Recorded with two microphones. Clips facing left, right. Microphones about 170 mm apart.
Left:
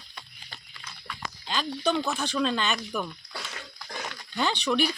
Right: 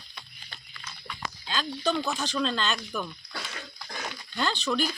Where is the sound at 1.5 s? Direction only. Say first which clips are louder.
Left 1 dB; 10° left (ahead or behind).